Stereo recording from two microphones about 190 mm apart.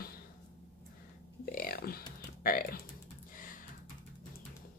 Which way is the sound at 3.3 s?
45° left (ahead or behind).